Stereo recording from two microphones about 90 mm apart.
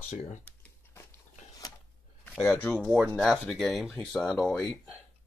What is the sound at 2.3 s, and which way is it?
Speech, 20° left (ahead or behind).